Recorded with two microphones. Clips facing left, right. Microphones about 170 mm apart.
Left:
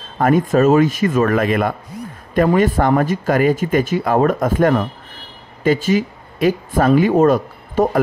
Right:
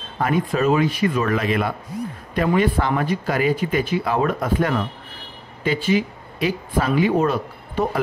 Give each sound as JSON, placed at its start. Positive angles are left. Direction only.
{"t": 0.2, "sound": "speech", "side_deg": 45}